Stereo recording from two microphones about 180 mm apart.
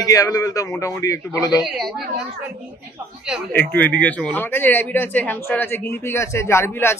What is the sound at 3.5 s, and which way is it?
A man's voice, 10° left (ahead or behind).